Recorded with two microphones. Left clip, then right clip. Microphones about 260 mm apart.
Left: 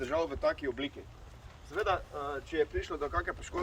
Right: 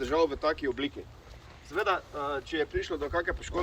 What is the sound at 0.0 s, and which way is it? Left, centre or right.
Speech, centre.